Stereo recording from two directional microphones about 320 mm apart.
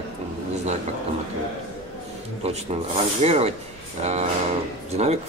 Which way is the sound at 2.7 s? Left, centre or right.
Centre.